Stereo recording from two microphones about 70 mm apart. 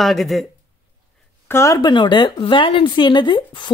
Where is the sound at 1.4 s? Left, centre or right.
Left.